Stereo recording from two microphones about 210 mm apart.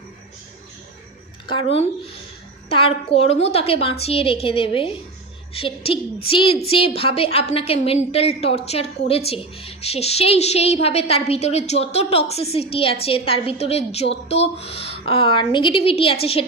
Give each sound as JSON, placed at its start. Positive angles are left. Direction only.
{"t": 1.5, "sound": "a woman's voice", "side_deg": 25}